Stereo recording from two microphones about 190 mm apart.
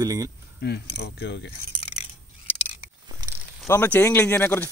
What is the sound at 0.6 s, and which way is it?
Speech, 60° left (ahead or behind).